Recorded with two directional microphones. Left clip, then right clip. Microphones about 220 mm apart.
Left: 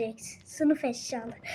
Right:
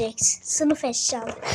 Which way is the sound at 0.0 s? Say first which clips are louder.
Right 10 dB; 15° right (ahead or behind).